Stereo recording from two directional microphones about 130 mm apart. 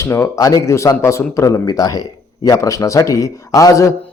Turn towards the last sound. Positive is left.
turn(degrees=25)  # may be behind; listen again after turning